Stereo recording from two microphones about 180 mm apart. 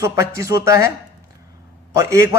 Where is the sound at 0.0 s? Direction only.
15° right (ahead or behind).